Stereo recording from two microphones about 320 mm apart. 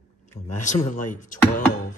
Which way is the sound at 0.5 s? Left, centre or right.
Left.